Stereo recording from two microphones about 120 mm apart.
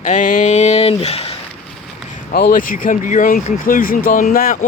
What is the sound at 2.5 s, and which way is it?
Speech, 90° left.